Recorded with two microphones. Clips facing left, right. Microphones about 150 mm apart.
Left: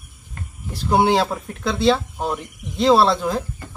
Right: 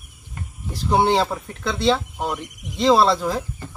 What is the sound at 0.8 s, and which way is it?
Speech, 5° left (ahead or behind).